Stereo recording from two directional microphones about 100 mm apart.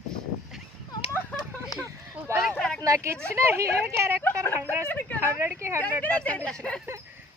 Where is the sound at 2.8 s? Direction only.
30° right (ahead or behind).